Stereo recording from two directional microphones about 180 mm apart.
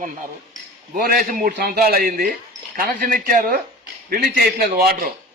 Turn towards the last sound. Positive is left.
turn(degrees=-55)  # may be behind; listen again after turning